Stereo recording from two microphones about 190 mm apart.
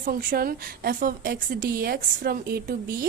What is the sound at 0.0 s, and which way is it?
A woman's voice, 45° right (ahead or behind).